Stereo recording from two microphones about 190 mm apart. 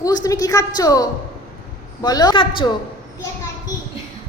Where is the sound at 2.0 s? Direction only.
20° left (ahead or behind).